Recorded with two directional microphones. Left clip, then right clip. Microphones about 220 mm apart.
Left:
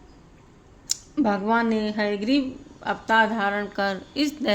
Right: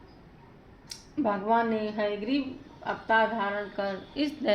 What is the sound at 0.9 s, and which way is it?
Speech, 55° left (ahead or behind).